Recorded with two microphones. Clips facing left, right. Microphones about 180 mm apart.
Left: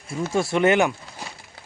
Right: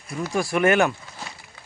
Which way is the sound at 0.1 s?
25° left (ahead or behind).